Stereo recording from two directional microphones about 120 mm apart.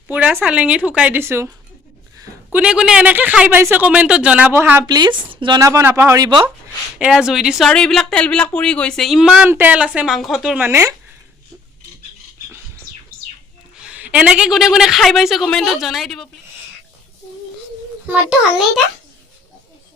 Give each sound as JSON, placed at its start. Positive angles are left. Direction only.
{"t": 0.1, "sound": "speech", "side_deg": -15}
{"t": 2.5, "sound": "speech", "side_deg": -10}
{"t": 4.8, "sound": "a woman's voice", "side_deg": -35}
{"t": 5.5, "sound": "speech", "side_deg": -25}
{"t": 7.0, "sound": "a woman's voice", "side_deg": -5}
{"t": 9.5, "sound": "a woman's voice", "side_deg": -15}
{"t": 10.6, "sound": "speech", "side_deg": -25}
{"t": 13.7, "sound": "a woman's voice", "side_deg": -10}
{"t": 18.1, "sound": "a woman's voice", "side_deg": -5}